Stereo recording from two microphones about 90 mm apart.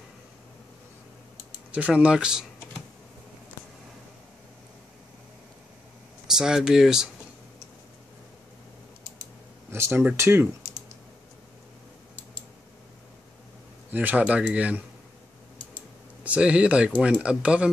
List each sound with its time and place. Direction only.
1.7 s speech: 15° right (ahead or behind)
6.3 s speech: 5° right (ahead or behind)
9.7 s speech: 25° right (ahead or behind)
13.8 s speech: 20° right (ahead or behind)
16.3 s speech: 15° right (ahead or behind)